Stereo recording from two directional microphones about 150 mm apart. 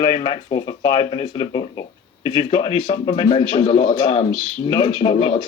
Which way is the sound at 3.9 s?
30° left (ahead or behind).